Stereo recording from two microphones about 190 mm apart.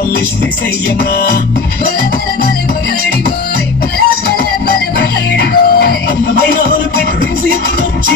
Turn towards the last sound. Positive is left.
turn(degrees=55)  # may be behind; listen again after turning